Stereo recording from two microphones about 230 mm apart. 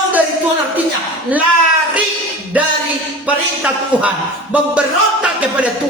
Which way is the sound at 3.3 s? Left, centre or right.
Centre.